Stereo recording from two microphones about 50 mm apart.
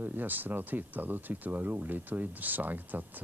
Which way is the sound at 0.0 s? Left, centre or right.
Right.